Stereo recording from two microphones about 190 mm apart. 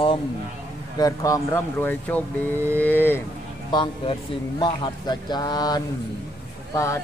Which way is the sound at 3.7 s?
25° left (ahead or behind).